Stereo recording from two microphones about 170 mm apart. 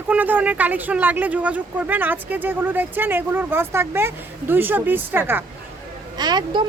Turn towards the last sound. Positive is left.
turn(degrees=-25)  # may be behind; listen again after turning